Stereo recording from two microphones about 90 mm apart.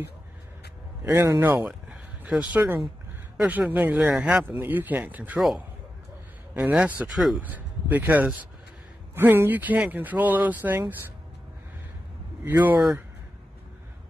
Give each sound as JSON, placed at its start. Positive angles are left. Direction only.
{"t": 1.0, "sound": "speech", "side_deg": -35}
{"t": 6.5, "sound": "a man's voice", "side_deg": -15}
{"t": 12.4, "sound": "speech", "side_deg": -20}